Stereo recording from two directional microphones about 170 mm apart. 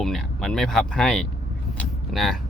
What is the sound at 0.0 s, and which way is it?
Speech, centre (ahead or behind).